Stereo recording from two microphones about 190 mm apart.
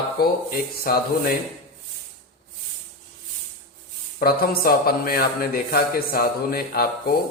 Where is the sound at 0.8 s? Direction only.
50° left (ahead or behind).